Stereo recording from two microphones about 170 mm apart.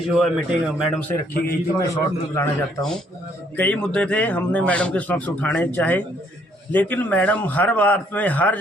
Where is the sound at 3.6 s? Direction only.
5° left (ahead or behind).